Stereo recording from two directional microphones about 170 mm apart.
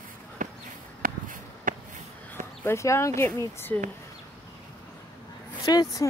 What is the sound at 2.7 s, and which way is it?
Speech, 15° left (ahead or behind).